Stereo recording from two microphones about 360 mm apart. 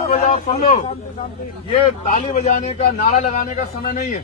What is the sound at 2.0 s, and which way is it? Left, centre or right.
A man's voice, centre.